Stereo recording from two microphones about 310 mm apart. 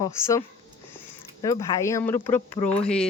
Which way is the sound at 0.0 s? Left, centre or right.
Centre.